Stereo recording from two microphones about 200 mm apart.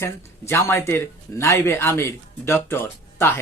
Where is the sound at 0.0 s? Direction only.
15° left (ahead or behind).